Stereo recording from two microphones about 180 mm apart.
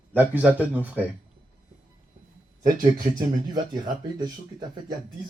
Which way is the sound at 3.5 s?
20° right (ahead or behind).